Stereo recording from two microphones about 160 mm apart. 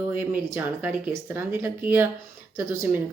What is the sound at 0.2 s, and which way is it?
Speech, 10° right (ahead or behind).